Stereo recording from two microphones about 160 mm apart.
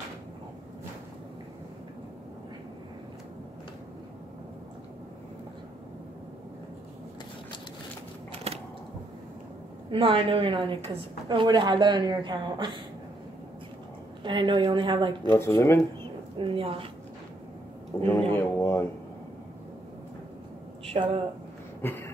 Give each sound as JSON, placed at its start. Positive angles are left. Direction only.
{"t": 9.8, "sound": "a woman's voice", "side_deg": -35}
{"t": 14.2, "sound": "a woman's voice", "side_deg": -30}
{"t": 15.3, "sound": "speech", "side_deg": 15}
{"t": 16.3, "sound": "a woman's voice", "side_deg": -35}
{"t": 18.3, "sound": "a sound", "side_deg": 15}
{"t": 20.8, "sound": "speech", "side_deg": -40}
{"t": 21.8, "sound": "a sound", "side_deg": 15}